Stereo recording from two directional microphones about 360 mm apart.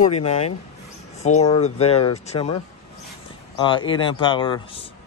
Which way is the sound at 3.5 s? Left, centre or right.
Centre.